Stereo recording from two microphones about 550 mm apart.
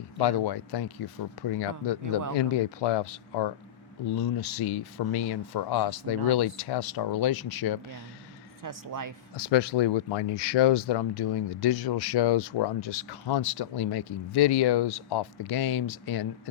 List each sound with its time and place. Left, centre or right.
0.2 s speech: left
8.6 s speech: right
9.3 s speech: left